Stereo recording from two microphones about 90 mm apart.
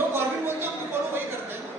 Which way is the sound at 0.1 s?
25° right (ahead or behind).